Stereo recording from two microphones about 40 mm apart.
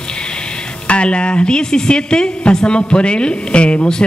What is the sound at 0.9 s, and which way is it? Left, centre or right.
Speech, left.